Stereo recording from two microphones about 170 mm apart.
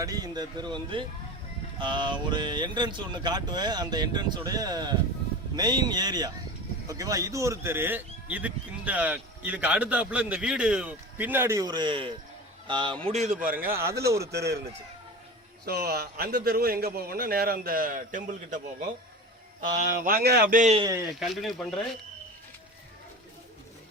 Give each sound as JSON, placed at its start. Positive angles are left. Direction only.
{"t": 0.0, "sound": "speech", "side_deg": -20}
{"t": 13.1, "sound": "speech", "side_deg": -45}
{"t": 13.7, "sound": "speech", "side_deg": -15}
{"t": 14.2, "sound": "a man's voice", "side_deg": -75}
{"t": 15.6, "sound": "a man's voice", "side_deg": -70}
{"t": 19.7, "sound": "a man's voice", "side_deg": -55}
{"t": 20.6, "sound": "speech", "side_deg": -40}
{"t": 21.2, "sound": "speech", "side_deg": 0}